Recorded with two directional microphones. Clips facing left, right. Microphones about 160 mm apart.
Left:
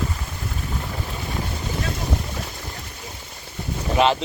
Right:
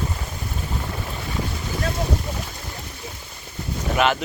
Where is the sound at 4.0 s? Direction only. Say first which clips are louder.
Left 2 dB; 30° left (ahead or behind).